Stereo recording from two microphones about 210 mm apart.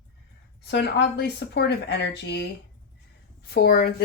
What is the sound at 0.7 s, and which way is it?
Speech, 55° left (ahead or behind).